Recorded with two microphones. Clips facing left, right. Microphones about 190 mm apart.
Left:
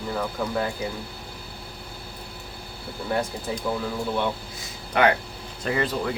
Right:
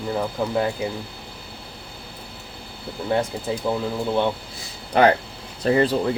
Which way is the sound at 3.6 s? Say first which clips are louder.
Right 3 dB; 20° right (ahead or behind).